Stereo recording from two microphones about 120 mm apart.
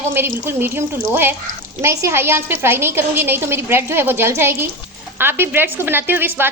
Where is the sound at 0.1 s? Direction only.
20° right (ahead or behind).